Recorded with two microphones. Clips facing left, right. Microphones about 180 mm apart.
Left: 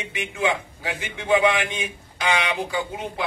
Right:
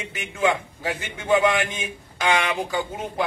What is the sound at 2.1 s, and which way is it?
Speech, 40° right (ahead or behind).